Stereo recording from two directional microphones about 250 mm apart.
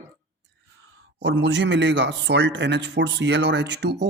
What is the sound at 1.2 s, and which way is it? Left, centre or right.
Speech, right.